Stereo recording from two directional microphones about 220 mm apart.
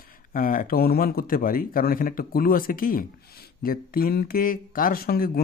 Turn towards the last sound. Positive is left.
turn(degrees=45)  # may be behind; listen again after turning